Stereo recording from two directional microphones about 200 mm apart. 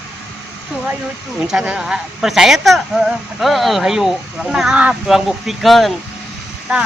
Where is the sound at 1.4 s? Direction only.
5° right (ahead or behind).